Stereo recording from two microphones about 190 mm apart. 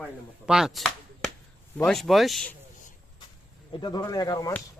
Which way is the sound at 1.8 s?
Centre (ahead or behind).